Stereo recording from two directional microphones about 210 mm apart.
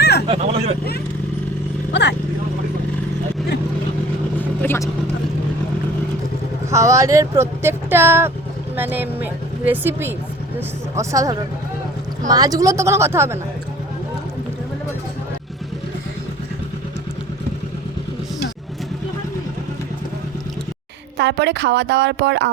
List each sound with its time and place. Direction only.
0.0 s vehicle: 50° left (ahead or behind)
1.9 s vehicle: 55° left (ahead or behind)
4.4 s vehicle: 10° left (ahead or behind)
6.7 s speech: 15° right (ahead or behind)
21.2 s speech: 55° right (ahead or behind)